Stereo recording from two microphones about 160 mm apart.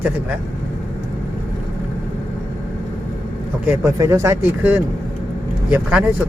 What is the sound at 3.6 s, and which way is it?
Speech, 15° right (ahead or behind).